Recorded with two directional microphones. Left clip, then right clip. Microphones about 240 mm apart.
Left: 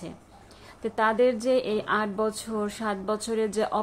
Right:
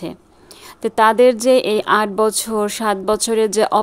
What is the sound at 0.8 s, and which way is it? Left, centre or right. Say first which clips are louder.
A woman's voice: right 11 dB; right.